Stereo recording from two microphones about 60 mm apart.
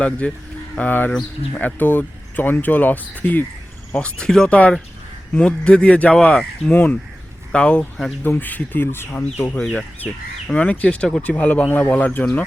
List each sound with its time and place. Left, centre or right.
0.0 s speech: centre
3.9 s speech: centre
4.4 s speech: left
8.4 s speech: left